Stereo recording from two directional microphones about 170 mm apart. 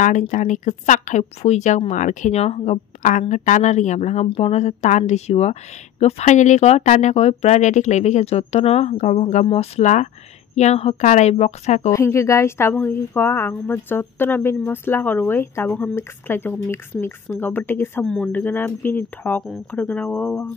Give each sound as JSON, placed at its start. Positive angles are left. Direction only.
{"t": 0.0, "sound": "a woman's voice", "side_deg": 45}
{"t": 11.9, "sound": "a woman's voice", "side_deg": 15}